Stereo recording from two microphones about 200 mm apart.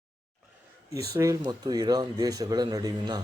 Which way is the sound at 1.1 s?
20° right (ahead or behind).